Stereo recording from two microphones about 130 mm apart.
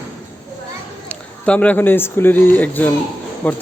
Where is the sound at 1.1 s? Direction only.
10° left (ahead or behind).